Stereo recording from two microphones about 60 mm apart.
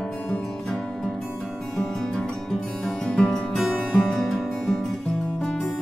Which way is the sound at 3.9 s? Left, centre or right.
Centre.